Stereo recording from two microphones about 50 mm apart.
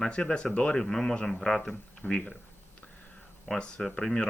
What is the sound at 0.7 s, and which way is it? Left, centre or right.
Speech, centre.